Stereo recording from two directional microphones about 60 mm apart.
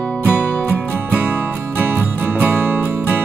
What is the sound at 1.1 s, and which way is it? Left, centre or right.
Music, right.